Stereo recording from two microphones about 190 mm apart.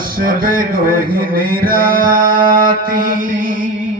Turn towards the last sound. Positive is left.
turn(degrees=-45)  # may be behind; listen again after turning